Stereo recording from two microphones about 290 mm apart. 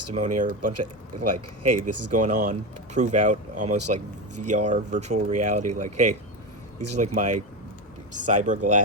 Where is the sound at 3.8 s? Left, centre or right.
Right.